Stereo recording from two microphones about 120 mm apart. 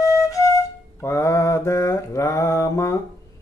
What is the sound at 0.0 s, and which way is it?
Flute, 30° left (ahead or behind).